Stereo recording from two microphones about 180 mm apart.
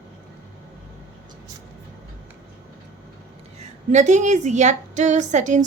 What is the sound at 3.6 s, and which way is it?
A woman's voice, 40° right (ahead or behind).